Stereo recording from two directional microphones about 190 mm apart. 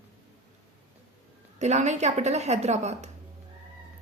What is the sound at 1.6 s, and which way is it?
A woman's voice, 35° right (ahead or behind).